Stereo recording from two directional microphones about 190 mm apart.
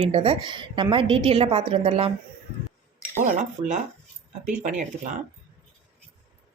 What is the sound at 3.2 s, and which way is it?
A woman's voice, 40° right (ahead or behind).